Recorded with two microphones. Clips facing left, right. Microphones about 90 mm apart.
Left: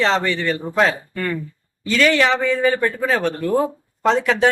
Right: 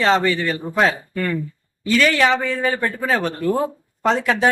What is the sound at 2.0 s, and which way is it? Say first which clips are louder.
Speech: left 2 dB; centre (ahead or behind).